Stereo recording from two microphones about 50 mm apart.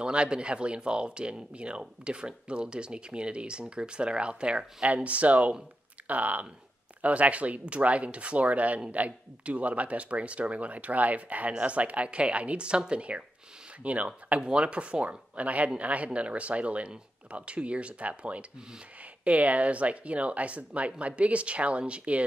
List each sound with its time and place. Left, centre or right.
0.0 s speech: right